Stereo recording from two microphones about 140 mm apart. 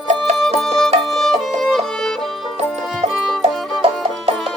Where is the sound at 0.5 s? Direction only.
5° left (ahead or behind).